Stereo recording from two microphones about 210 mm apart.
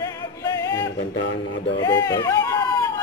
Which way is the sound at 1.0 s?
55° left (ahead or behind).